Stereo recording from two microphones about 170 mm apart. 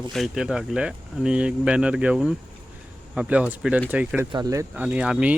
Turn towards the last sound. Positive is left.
turn(degrees=-5)  # may be behind; listen again after turning